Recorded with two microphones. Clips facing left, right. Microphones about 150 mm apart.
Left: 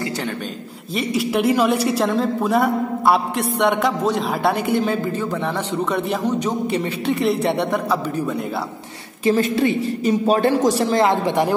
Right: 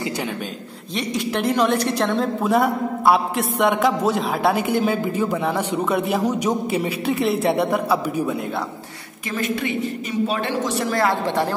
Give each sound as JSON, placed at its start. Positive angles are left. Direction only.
{"t": 0.9, "sound": "a woman's voice", "side_deg": 5}
{"t": 9.2, "sound": "a woman's voice", "side_deg": 30}
{"t": 10.9, "sound": "a woman's voice", "side_deg": 20}